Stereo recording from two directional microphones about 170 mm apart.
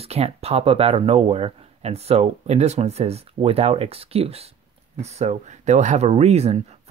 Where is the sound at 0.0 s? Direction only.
35° right (ahead or behind).